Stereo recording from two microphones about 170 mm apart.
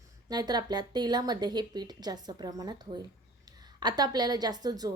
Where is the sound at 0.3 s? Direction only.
25° right (ahead or behind).